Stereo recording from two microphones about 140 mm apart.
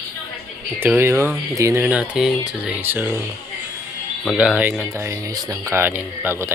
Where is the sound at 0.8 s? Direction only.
15° right (ahead or behind).